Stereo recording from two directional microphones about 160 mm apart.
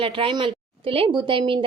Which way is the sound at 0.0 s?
35° right (ahead or behind).